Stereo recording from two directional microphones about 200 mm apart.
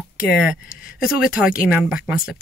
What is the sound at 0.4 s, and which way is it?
Speech, 5° right (ahead or behind).